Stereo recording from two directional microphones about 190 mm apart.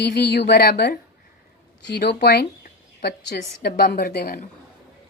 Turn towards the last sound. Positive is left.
turn(degrees=55)  # may be behind; listen again after turning